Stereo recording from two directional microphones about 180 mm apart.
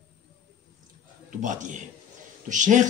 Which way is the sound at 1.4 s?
45° right (ahead or behind).